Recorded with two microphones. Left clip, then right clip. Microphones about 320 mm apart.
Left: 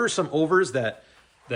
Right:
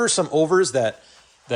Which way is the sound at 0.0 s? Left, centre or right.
Centre.